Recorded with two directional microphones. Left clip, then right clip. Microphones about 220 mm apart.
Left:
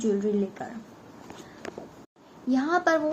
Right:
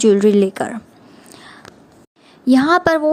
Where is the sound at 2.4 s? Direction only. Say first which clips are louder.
Right 11 dB; 45° right (ahead or behind).